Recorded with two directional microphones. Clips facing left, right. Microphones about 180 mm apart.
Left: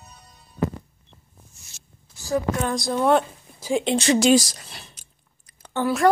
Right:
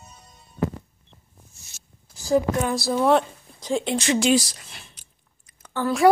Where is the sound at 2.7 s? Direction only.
5° right (ahead or behind).